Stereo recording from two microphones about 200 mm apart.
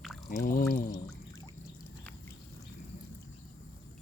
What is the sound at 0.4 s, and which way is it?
Pour, 45° left (ahead or behind).